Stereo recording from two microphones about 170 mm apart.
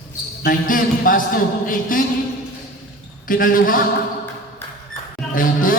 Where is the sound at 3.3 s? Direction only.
55° left (ahead or behind).